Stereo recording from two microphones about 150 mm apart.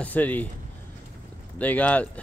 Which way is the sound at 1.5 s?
10° left (ahead or behind).